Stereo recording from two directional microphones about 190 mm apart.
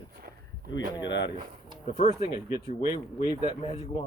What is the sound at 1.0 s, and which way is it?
Speech, 70° left (ahead or behind).